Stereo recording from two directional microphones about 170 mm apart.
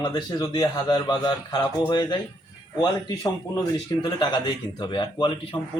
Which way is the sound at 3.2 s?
25° left (ahead or behind).